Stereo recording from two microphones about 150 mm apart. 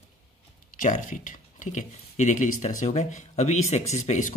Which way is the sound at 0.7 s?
60° left (ahead or behind).